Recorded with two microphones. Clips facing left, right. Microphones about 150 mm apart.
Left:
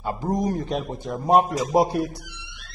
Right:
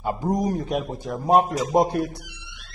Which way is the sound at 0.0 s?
15° right (ahead or behind).